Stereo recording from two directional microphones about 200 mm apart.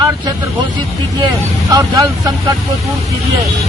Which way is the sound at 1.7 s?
20° right (ahead or behind).